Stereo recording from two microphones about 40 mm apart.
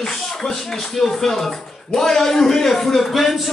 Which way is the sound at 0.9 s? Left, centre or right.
Centre.